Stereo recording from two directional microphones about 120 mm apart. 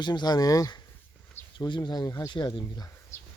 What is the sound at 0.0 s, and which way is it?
Speech, 35° left (ahead or behind).